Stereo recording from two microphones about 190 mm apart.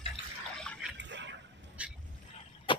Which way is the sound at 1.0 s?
70° right (ahead or behind).